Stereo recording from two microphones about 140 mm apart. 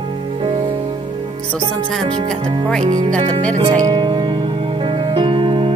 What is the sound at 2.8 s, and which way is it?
Speech, 60° right (ahead or behind).